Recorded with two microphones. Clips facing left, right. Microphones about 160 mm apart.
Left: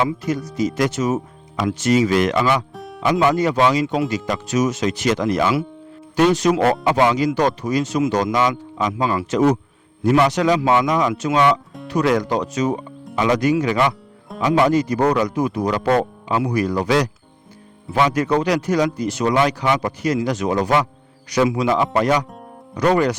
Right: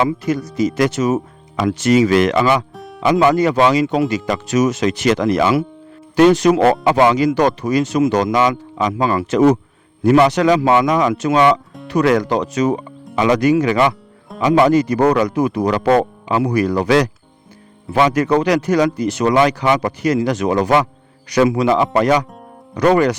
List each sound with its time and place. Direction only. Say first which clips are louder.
0.5 s speech: right 4 dB; 70° right (ahead or behind)
2.7 s music: even; centre (ahead or behind)
3.0 s speech: right 4 dB; 80° right
13.1 s a man's voice: right 4 dB; 90° right; by 23.1 s 65° right (ahead or behind)